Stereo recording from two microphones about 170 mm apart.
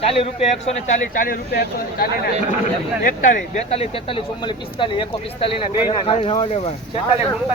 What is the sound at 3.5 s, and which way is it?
Speech, 35° left (ahead or behind).